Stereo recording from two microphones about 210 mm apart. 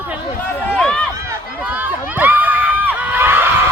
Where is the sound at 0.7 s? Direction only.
5° left (ahead or behind).